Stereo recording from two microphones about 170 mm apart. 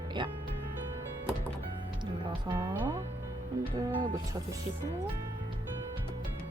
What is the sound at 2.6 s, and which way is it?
Music, 15° right (ahead or behind).